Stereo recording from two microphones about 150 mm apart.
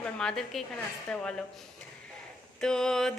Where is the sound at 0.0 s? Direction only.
5° left (ahead or behind).